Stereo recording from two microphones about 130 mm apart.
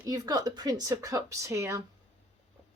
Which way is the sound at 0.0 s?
30° right (ahead or behind).